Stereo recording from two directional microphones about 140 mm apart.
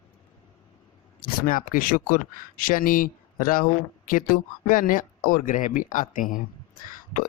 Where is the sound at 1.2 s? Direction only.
85° left.